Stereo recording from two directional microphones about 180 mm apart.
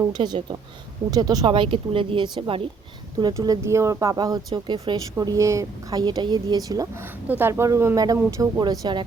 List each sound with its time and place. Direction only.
0.1 s a woman's voice: 25° right (ahead or behind)